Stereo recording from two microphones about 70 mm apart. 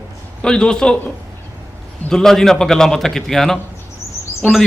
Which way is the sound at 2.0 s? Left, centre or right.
Centre.